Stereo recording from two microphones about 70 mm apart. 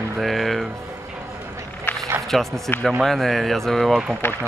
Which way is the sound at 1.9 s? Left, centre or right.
Left.